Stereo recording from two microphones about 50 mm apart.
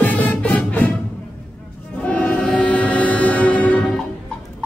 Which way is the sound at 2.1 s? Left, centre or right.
Left.